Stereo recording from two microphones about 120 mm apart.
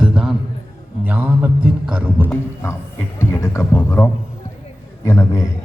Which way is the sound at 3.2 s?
25° left (ahead or behind).